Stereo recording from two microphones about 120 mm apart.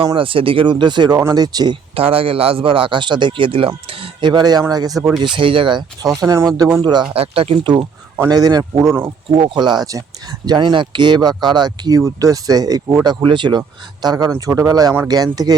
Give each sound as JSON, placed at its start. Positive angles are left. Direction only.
{"t": 0.1, "sound": "speech", "side_deg": -45}
{"t": 2.0, "sound": "speech", "side_deg": -50}
{"t": 5.2, "sound": "speech", "side_deg": -45}
{"t": 6.1, "sound": "speech", "side_deg": -30}
{"t": 7.1, "sound": "speech", "side_deg": -55}
{"t": 8.3, "sound": "speech", "side_deg": -35}
{"t": 9.3, "sound": "speech", "side_deg": -45}